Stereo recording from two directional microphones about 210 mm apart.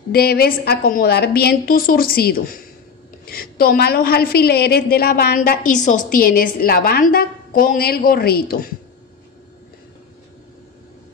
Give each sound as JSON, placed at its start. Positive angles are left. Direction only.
{"t": 0.1, "sound": "a woman's voice", "side_deg": 45}